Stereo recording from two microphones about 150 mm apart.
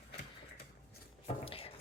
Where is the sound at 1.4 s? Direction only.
40° left (ahead or behind).